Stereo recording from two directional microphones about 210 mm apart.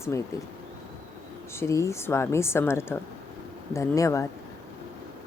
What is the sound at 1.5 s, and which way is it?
A woman's voice, 15° left (ahead or behind).